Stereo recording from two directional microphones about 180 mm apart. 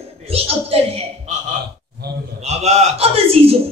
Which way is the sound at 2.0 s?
65° right (ahead or behind).